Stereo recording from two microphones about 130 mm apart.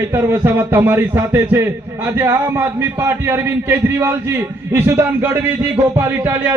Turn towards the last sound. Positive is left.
turn(degrees=-20)  # may be behind; listen again after turning